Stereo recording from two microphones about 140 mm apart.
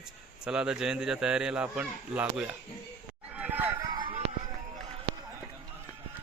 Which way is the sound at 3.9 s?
30° right (ahead or behind).